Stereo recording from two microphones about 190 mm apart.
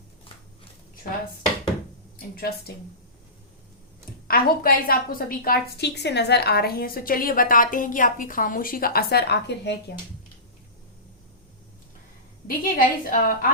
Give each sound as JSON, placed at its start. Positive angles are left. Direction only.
{"t": 2.1, "sound": "speech", "side_deg": 50}
{"t": 4.3, "sound": "a woman's voice", "side_deg": 50}
{"t": 12.5, "sound": "a woman's voice", "side_deg": 45}